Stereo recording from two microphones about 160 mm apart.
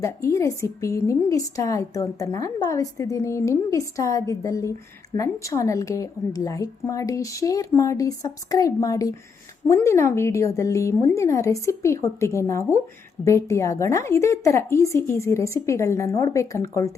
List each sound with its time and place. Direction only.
0.0 s a woman's voice: 20° left (ahead or behind)